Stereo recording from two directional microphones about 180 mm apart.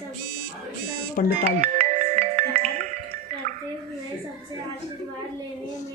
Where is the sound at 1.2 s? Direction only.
50° left (ahead or behind).